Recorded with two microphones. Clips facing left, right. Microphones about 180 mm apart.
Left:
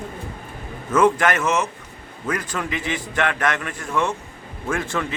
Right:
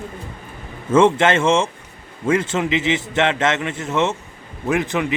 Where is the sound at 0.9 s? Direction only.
25° right (ahead or behind).